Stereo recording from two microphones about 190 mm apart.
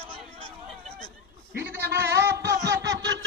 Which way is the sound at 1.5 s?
10° right (ahead or behind).